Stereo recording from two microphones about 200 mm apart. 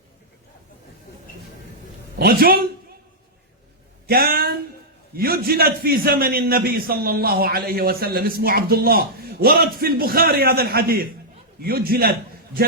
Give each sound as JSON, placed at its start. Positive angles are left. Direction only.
{"t": 2.1, "sound": "a man's voice", "side_deg": -50}
{"t": 4.0, "sound": "a sound", "side_deg": -50}
{"t": 5.1, "sound": "a man's voice", "side_deg": -50}